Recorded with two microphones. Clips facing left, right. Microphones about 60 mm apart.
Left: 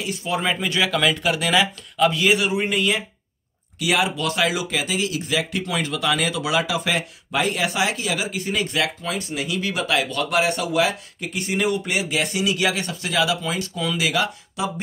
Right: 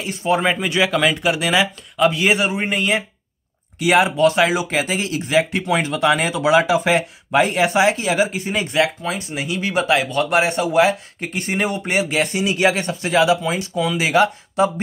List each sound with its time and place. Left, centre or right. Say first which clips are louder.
0.0 s speech: right 5 dB; right
13.4 s speech: right 5 dB; centre
14.0 s speech: right 9 dB; right